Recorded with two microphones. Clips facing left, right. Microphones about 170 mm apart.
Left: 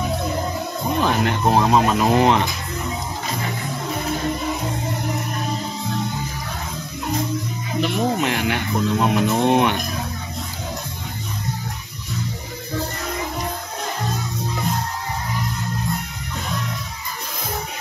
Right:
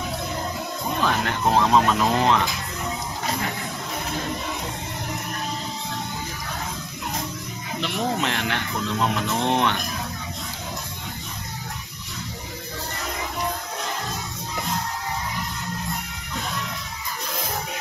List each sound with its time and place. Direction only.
1.0 s speech: 20° left (ahead or behind)
7.8 s speech: 15° left (ahead or behind)